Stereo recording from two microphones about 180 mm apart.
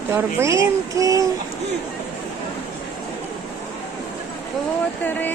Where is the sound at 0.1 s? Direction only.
15° right (ahead or behind).